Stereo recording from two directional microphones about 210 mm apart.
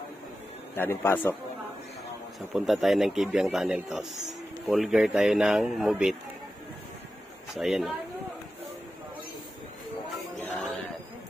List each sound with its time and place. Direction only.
0.7 s a man's voice: 10° left (ahead or behind)
2.5 s a man's voice: centre (ahead or behind)
7.5 s a man's voice: centre (ahead or behind)
10.3 s a sound: 5° left (ahead or behind)